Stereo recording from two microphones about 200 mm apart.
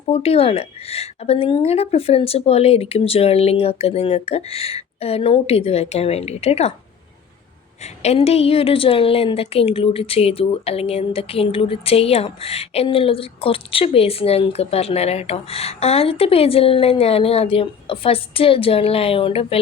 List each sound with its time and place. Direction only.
0.0 s a woman's voice: 30° left (ahead or behind)
8.0 s a woman's voice: 30° left (ahead or behind)